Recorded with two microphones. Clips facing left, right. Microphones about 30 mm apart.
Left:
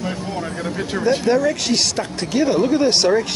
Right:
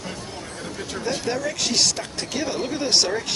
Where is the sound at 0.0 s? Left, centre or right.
Left.